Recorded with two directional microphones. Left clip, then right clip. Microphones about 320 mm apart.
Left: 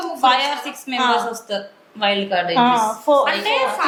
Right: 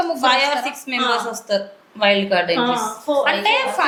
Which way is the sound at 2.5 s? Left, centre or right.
Left.